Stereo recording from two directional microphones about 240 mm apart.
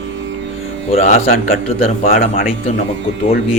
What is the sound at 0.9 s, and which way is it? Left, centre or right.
Speech, left.